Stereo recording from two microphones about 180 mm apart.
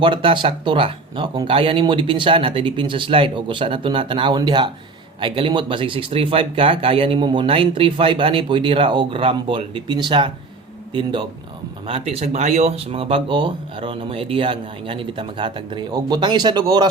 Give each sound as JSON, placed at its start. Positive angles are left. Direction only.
{"t": 0.0, "sound": "speech", "side_deg": -30}